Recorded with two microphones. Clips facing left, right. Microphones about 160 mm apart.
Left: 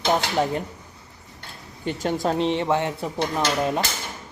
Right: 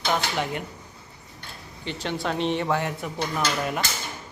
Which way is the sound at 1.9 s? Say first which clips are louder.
Left 5 dB; 45° left (ahead or behind).